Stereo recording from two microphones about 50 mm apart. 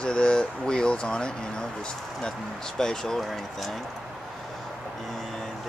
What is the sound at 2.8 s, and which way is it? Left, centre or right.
Speech, centre.